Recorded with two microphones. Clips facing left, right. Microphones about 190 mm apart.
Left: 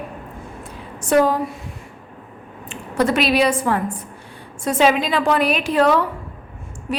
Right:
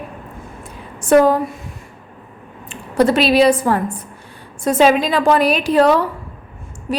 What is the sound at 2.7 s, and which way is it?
A woman's voice, 35° right (ahead or behind).